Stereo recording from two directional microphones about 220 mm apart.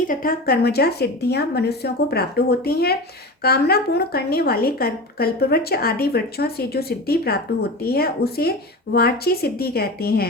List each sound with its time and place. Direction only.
0.1 s a woman's voice: 40° left (ahead or behind)